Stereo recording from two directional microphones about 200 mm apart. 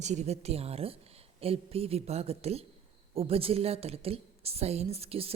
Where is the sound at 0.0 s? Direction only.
35° right (ahead or behind).